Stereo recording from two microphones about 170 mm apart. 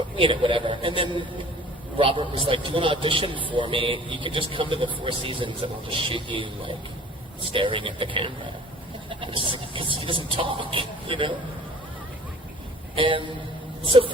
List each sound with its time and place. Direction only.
0.2 s a man's voice: 30° right (ahead or behind)
13.0 s speech: 30° right (ahead or behind)